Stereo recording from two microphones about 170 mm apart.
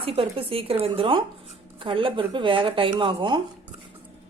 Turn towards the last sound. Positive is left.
turn(degrees=-30)  # may be behind; listen again after turning